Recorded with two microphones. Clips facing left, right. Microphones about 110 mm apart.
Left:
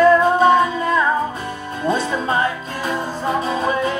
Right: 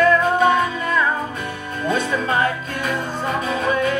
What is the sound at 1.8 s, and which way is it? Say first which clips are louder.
Music: left 1 dB; 25° left (ahead or behind).